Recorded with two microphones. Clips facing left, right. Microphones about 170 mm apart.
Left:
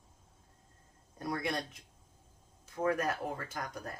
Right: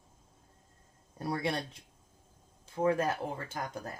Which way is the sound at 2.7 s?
25° right (ahead or behind).